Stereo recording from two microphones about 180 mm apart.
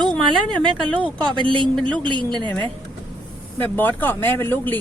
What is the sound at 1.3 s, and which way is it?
Speech, 25° right (ahead or behind).